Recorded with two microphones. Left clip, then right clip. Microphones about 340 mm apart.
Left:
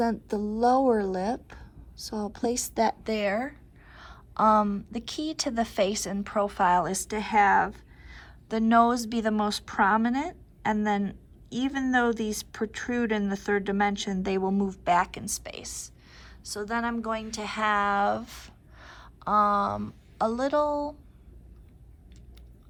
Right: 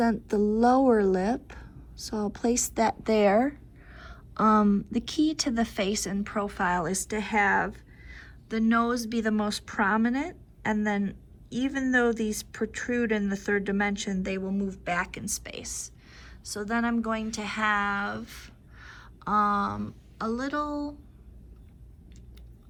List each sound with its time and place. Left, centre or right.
0.0 s speech: centre